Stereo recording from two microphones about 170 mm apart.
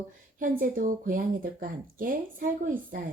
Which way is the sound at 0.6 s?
55° right (ahead or behind).